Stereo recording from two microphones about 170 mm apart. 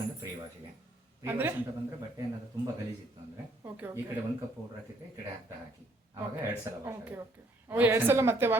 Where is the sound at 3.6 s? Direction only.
10° right (ahead or behind).